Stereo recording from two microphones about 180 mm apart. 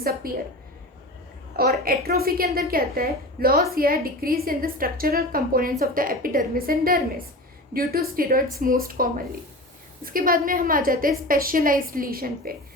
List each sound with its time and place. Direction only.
0.2 s a woman's voice: 55° right (ahead or behind)
1.5 s a woman's voice: 55° right (ahead or behind)